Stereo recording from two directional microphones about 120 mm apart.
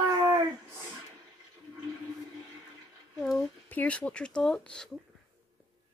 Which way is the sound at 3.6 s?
10° left (ahead or behind).